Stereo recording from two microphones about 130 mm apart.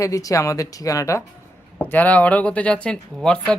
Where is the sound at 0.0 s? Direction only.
25° left (ahead or behind).